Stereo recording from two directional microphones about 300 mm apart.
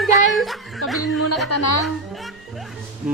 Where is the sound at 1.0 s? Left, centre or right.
Left.